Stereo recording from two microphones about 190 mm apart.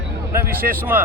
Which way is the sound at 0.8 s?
10° right (ahead or behind).